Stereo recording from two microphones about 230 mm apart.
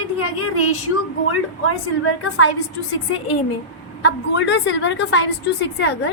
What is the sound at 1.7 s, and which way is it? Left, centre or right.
Speech, left.